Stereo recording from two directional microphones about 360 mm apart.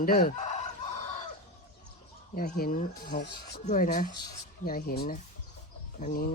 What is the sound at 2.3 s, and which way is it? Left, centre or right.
Speech, left.